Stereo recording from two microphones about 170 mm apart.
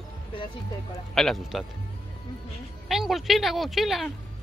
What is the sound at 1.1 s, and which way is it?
Speech, centre (ahead or behind).